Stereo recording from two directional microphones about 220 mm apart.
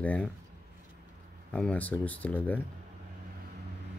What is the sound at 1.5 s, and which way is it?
Speech, 5° left (ahead or behind).